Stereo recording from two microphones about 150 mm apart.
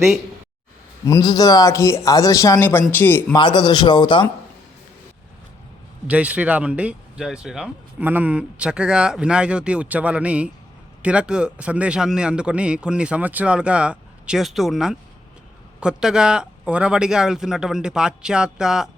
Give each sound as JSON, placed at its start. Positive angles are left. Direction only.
{"t": 1.0, "sound": "a man's voice", "side_deg": 25}
{"t": 3.3, "sound": "a man's voice", "side_deg": 30}
{"t": 6.1, "sound": "speech", "side_deg": -10}